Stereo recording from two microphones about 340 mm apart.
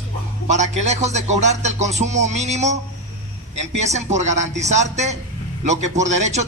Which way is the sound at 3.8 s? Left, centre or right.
Centre.